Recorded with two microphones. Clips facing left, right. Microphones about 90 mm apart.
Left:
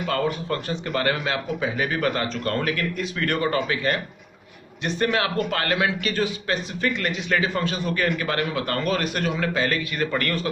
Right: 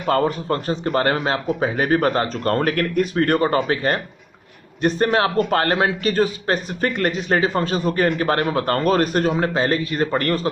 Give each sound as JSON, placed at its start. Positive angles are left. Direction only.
{"t": 0.0, "sound": "a man's voice", "side_deg": -35}